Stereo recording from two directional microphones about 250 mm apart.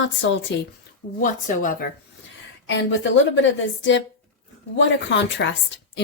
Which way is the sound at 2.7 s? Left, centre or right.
Left.